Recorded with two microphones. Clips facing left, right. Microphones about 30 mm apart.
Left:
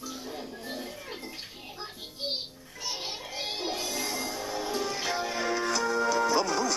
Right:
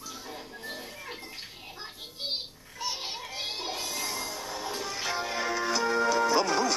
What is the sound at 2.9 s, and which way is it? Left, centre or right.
Music, centre.